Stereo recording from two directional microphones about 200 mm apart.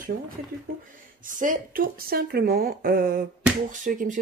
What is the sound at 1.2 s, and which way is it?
Speech, 40° right (ahead or behind).